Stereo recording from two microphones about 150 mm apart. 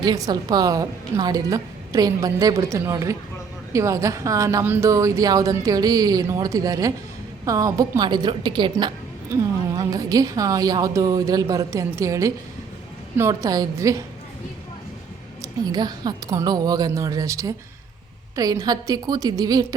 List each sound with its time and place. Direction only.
0.0 s a woman's voice: 25° right (ahead or behind)
15.4 s a woman's voice: 25° right (ahead or behind)